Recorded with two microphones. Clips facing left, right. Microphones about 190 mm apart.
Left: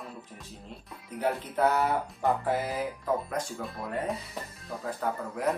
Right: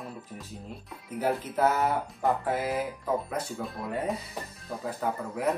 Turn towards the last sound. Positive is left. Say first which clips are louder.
# right 1 dB
turn(degrees=0)  # may be behind; listen again after turning